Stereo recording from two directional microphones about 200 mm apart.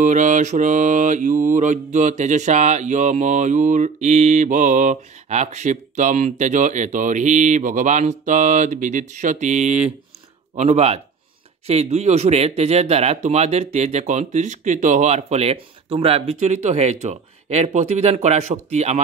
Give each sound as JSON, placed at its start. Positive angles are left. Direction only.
{"t": 0.0, "sound": "mantra", "side_deg": -40}